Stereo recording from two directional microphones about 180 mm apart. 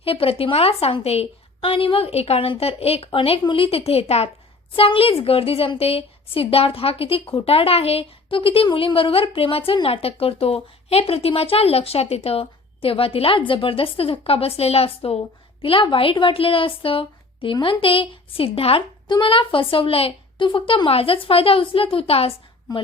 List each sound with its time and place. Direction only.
0.0 s a woman's voice: 30° left (ahead or behind)